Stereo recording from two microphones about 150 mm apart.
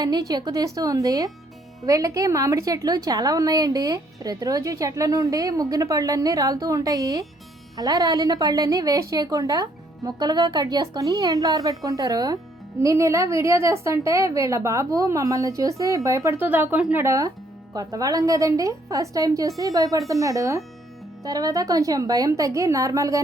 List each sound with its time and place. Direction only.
0.0 s a woman's voice: 25° right (ahead or behind)